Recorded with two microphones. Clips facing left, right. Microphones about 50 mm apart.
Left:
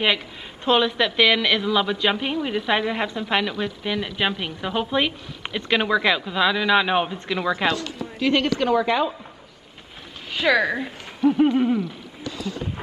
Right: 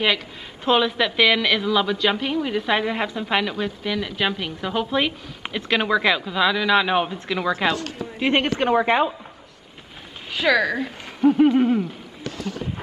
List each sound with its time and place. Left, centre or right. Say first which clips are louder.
0.7 s a woman's voice: even; centre
7.7 s a woman's voice: even; right
10.3 s speech: even; centre
11.2 s hoot: right 2 dB; centre
12.2 s speech: even; right